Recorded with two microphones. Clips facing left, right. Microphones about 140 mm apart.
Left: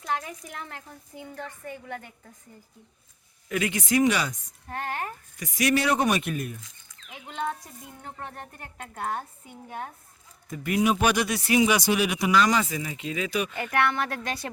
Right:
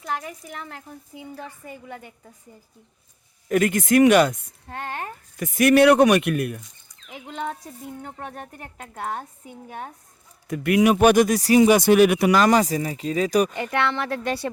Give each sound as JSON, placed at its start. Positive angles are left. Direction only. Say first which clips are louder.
{"t": 0.0, "sound": "a woman's voice", "louder": "right 1 dB", "side_deg": 0}
{"t": 3.5, "sound": "speech", "louder": "right 7 dB", "side_deg": -50}
{"t": 4.8, "sound": "speech", "louder": "right 1 dB", "side_deg": -25}
{"t": 5.4, "sound": "speech", "louder": "right 9 dB", "side_deg": -55}
{"t": 10.5, "sound": "speech", "louder": "right 6 dB", "side_deg": -70}
{"t": 13.6, "sound": "speech", "louder": "right 1 dB", "side_deg": -25}